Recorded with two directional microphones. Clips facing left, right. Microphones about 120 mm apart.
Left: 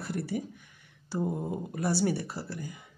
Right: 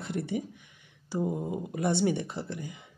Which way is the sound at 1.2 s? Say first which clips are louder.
Right 1 dB; 5° right (ahead or behind).